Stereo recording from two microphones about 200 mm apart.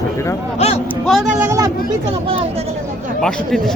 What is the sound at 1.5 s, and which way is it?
Speech, 15° right (ahead or behind).